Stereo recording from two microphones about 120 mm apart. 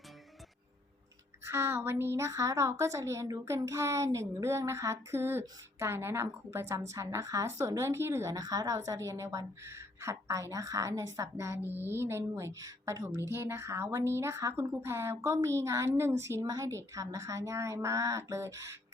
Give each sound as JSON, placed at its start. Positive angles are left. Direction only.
{"t": 1.5, "sound": "a woman's voice", "side_deg": -20}